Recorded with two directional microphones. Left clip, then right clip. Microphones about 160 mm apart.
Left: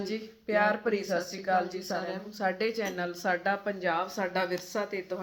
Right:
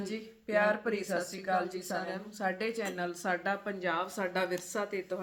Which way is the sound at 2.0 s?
25° right (ahead or behind).